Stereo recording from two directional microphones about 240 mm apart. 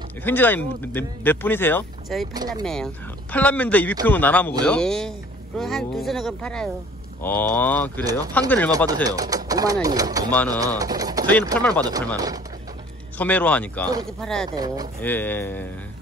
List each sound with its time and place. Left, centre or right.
0.2 s speech: centre
2.3 s speech: centre
2.6 s speech: centre
8.0 s speech: centre
8.3 s speech: centre
8.7 s speech: centre
11.5 s speech: centre
13.2 s speech: centre
14.5 s speech: centre
15.0 s speech: centre